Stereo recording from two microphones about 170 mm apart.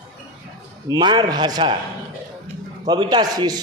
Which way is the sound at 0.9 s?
25° right (ahead or behind).